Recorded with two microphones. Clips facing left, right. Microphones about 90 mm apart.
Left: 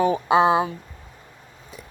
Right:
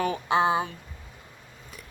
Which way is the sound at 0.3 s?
90° left.